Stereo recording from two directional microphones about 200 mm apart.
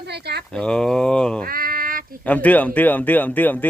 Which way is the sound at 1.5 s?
50° right (ahead or behind).